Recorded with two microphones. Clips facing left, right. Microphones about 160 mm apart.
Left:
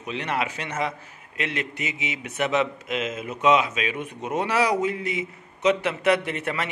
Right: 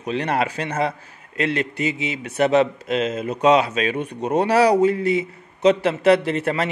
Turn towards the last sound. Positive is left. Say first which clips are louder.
# right 7 dB
turn(degrees=-35)  # may be behind; listen again after turning